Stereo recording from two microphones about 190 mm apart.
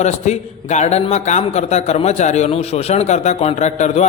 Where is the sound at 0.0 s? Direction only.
35° left (ahead or behind).